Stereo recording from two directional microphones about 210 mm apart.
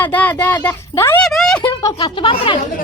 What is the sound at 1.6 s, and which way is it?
Speech, 20° left (ahead or behind).